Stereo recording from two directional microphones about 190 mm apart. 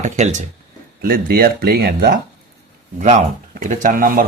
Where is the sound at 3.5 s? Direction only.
45° right (ahead or behind).